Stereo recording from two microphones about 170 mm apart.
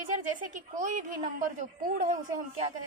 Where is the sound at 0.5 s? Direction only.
45° right (ahead or behind).